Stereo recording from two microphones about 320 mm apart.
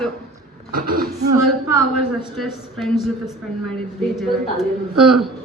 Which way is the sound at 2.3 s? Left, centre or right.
Centre.